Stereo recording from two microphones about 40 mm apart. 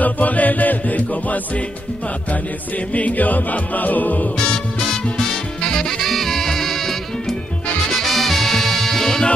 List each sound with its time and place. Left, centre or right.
0.0 s music: left
2.9 s music: left
5.7 s music: centre